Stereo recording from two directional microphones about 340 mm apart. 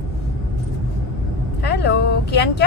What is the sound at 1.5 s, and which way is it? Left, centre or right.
Speech, left.